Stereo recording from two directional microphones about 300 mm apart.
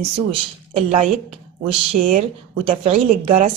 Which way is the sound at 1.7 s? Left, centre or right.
Centre.